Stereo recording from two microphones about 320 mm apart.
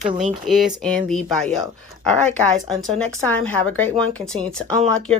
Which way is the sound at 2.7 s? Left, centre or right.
Centre.